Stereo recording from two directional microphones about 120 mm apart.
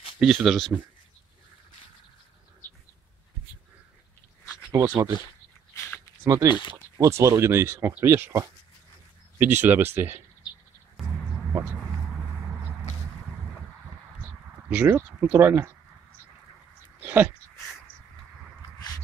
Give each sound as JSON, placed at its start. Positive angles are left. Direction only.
{"t": 0.2, "sound": "speech", "side_deg": -5}
{"t": 4.7, "sound": "speech", "side_deg": -20}
{"t": 6.2, "sound": "speech", "side_deg": -25}
{"t": 9.4, "sound": "speech", "side_deg": -15}
{"t": 11.0, "sound": "a sound", "side_deg": 0}
{"t": 14.7, "sound": "speech", "side_deg": -15}
{"t": 17.0, "sound": "a sound", "side_deg": -15}